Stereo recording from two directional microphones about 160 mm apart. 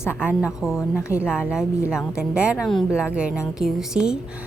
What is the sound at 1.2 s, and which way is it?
A woman's voice, 5° right (ahead or behind).